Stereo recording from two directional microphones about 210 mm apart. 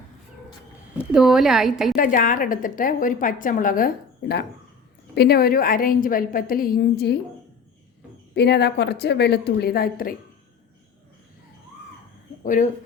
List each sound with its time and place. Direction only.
0.9 s a woman's voice: centre (ahead or behind)
2.0 s a woman's voice: 40° left (ahead or behind)
8.4 s a woman's voice: 50° left (ahead or behind)
12.4 s speech: 40° left (ahead or behind)